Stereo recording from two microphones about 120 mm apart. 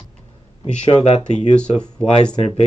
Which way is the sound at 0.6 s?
70° left (ahead or behind).